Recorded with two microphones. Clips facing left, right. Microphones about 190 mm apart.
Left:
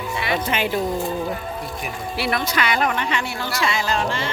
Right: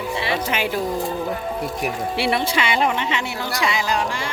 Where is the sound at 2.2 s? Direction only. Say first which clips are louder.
Right 1 dB; 30° right (ahead or behind).